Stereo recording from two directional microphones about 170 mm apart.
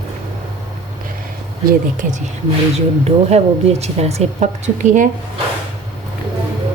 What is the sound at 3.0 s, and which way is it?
A woman's voice, 40° right (ahead or behind).